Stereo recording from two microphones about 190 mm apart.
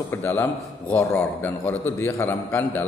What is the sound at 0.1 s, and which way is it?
A man's voice, 10° left (ahead or behind).